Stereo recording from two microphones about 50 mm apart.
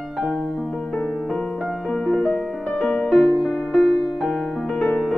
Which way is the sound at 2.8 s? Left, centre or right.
Centre.